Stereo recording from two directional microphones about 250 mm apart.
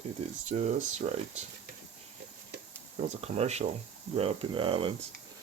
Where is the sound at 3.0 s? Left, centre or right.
Right.